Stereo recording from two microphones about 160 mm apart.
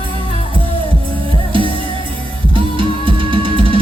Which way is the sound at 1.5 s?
30° right (ahead or behind).